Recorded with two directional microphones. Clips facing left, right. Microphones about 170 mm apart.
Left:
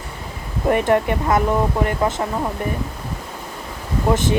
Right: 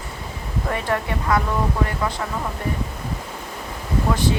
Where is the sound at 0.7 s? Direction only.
20° left (ahead or behind).